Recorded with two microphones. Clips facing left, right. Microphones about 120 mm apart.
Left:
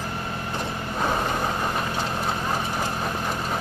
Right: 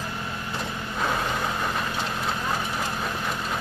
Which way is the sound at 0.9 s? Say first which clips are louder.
Left 2 dB; 25° left (ahead or behind).